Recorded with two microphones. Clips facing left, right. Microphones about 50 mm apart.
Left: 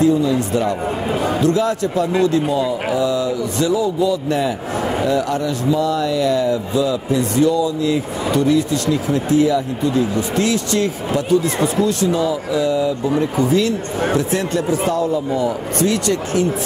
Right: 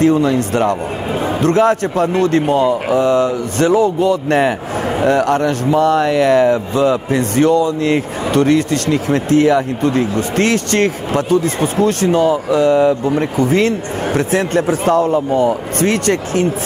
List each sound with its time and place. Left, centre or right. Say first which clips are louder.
0.0 s a man's voice: right 3 dB; right